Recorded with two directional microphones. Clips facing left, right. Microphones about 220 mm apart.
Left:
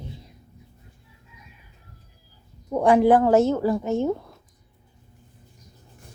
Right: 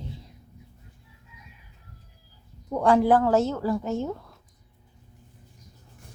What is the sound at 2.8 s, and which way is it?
Speech, 15° left (ahead or behind).